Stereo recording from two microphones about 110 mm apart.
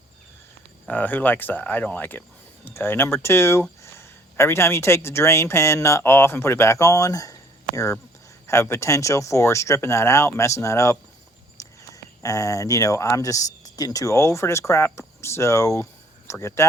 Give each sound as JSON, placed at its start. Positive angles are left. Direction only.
{"t": 0.9, "sound": "speech", "side_deg": 15}
{"t": 8.6, "sound": "speech", "side_deg": 25}
{"t": 11.6, "sound": "a sound", "side_deg": 30}
{"t": 12.2, "sound": "speech", "side_deg": 30}